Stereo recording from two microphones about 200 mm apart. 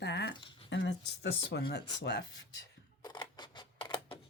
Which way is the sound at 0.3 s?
25° left (ahead or behind).